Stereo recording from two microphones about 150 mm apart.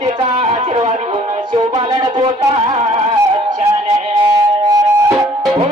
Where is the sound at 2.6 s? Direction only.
45° right (ahead or behind).